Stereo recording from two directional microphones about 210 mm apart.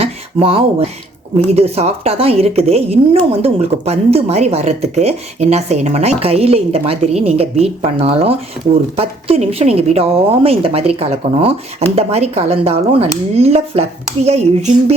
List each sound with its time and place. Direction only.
0.0 s a woman's voice: 25° right (ahead or behind)